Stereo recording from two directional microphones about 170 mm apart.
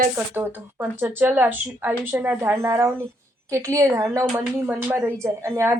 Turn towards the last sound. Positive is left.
turn(degrees=-15)  # may be behind; listen again after turning